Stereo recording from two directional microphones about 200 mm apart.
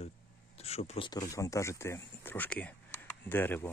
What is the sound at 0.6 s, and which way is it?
A man's voice, 30° left (ahead or behind).